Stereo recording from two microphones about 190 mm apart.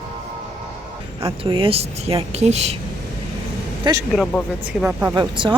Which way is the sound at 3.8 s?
20° right (ahead or behind).